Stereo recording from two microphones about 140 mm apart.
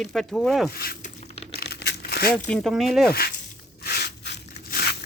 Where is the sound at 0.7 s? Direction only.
90° left.